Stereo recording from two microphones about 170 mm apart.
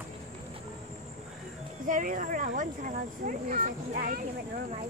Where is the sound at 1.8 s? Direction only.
50° right (ahead or behind).